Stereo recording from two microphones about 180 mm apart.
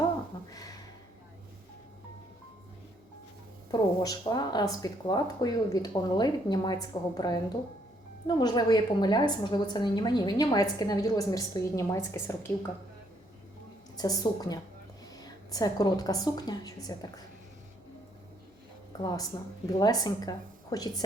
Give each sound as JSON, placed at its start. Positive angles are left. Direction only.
{"t": 3.7, "sound": "a woman's voice", "side_deg": 20}
{"t": 13.9, "sound": "a woman's voice", "side_deg": 20}
{"t": 18.9, "sound": "a woman's voice", "side_deg": 25}